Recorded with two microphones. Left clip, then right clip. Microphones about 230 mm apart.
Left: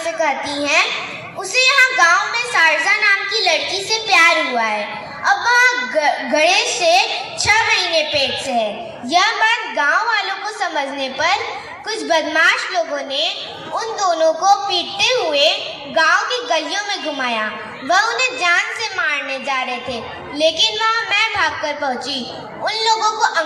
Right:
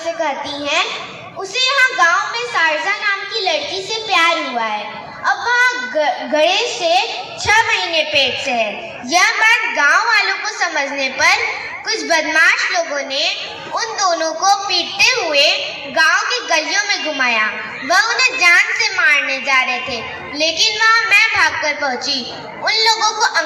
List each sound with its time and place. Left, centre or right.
0.2 s a woman's voice: left
1.5 s a sound: left
7.5 s a woman's voice: left
9.0 s a woman's voice: left
21.1 s a woman's voice: left